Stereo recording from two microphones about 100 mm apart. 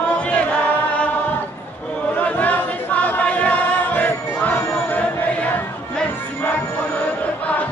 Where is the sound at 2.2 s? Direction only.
15° left (ahead or behind).